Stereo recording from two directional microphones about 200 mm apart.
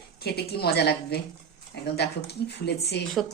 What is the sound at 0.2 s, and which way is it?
A woman's voice, 55° left (ahead or behind).